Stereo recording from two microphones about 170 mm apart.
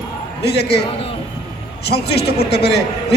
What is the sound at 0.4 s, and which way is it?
Speech, 75° left (ahead or behind).